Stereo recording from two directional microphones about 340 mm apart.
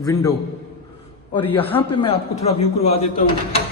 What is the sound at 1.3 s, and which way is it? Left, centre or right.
Speech, centre.